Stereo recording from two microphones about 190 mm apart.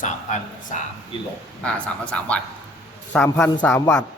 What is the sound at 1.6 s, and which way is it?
Speech, 5° left (ahead or behind).